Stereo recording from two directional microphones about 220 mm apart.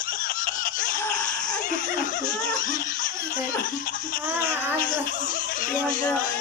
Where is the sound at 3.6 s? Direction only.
40° left (ahead or behind).